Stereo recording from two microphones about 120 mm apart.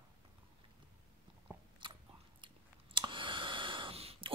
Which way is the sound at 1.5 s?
20° right (ahead or behind).